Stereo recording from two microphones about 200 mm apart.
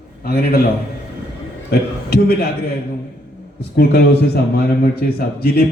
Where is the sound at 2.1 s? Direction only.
55° left (ahead or behind).